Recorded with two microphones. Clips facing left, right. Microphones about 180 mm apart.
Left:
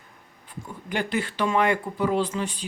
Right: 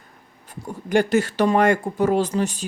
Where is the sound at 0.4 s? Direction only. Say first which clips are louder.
Right 5 dB; 45° right (ahead or behind).